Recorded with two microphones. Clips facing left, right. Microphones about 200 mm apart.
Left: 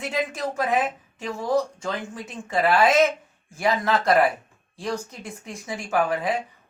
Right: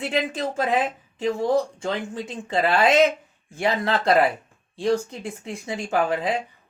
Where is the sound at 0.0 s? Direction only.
25° right (ahead or behind).